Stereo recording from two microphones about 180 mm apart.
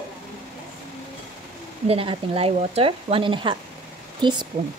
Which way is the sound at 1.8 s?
30° right (ahead or behind).